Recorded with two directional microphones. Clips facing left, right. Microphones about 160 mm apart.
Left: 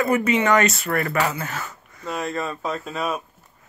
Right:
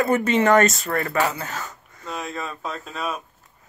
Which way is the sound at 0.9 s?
25° right (ahead or behind).